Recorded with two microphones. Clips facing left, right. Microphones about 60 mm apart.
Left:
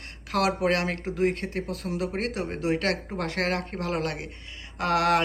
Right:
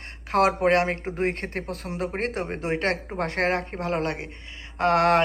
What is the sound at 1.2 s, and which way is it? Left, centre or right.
Speech, right.